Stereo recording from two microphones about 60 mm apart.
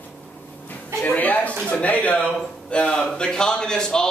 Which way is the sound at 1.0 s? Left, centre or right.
Left.